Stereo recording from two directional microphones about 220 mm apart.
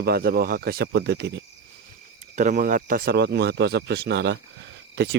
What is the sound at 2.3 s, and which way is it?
Speech, 35° right (ahead or behind).